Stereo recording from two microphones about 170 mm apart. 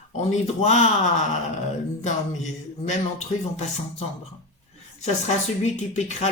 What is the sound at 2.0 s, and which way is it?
Speech, 45° left (ahead or behind).